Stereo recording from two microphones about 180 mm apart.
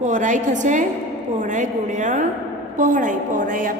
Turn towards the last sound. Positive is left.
turn(degrees=-45)  # may be behind; listen again after turning